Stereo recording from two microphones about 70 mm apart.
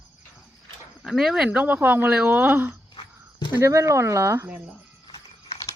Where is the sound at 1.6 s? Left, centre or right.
Right.